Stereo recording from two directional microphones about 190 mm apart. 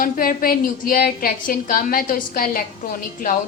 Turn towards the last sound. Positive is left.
turn(degrees=45)  # may be behind; listen again after turning